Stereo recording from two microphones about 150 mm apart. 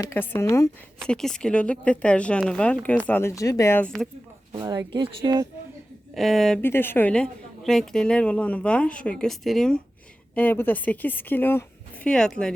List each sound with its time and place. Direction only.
0.1 s a woman's voice: 15° left (ahead or behind)
0.9 s a woman's voice: 5° left (ahead or behind)
4.5 s speech: 25° right (ahead or behind)
6.1 s speech: centre (ahead or behind)
6.6 s a woman's voice: 15° left (ahead or behind)